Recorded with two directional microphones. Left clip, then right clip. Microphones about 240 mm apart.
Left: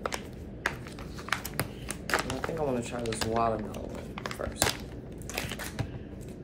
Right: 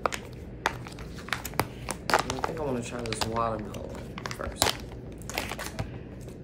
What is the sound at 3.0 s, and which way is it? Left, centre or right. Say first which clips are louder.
Speech: right 1 dB; right.